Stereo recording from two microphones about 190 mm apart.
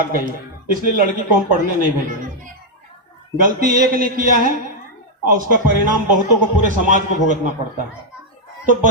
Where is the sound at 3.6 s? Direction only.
50° right (ahead or behind).